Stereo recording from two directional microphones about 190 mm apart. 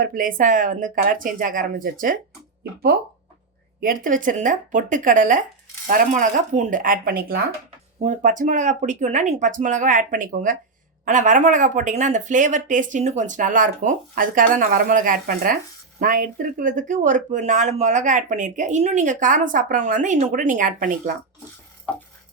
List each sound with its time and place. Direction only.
0.0 s speech: 45° right (ahead or behind)
3.8 s speech: 50° right (ahead or behind)